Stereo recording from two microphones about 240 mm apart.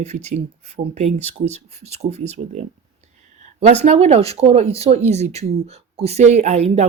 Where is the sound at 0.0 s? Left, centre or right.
Right.